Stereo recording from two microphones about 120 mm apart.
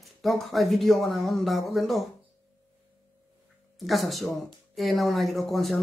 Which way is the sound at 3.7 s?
Centre (ahead or behind).